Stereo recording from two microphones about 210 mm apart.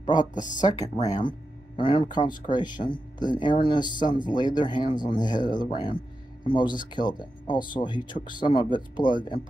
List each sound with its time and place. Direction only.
0.0 s speech: 20° left (ahead or behind)
0.3 s speech: 35° left (ahead or behind)
1.0 s speech: 20° left (ahead or behind)